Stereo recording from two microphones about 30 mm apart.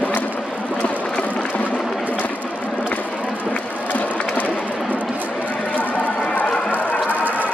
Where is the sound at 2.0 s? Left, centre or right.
Left.